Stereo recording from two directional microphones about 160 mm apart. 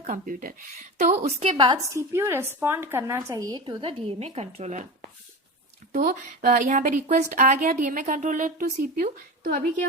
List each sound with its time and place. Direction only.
0.0 s a woman's voice: 55° right (ahead or behind)
1.0 s a woman's voice: 45° right (ahead or behind)
6.1 s a woman's voice: 60° right (ahead or behind)